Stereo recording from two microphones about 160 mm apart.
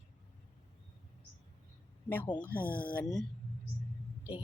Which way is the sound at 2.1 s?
10° left (ahead or behind).